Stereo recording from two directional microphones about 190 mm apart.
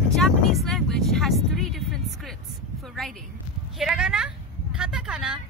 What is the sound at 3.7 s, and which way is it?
Speech, 5° right (ahead or behind).